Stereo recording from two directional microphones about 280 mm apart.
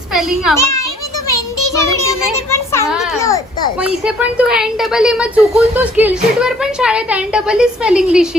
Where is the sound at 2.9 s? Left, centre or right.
Centre.